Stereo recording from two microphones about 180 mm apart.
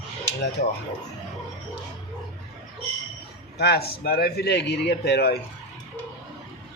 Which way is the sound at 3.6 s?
60° left (ahead or behind).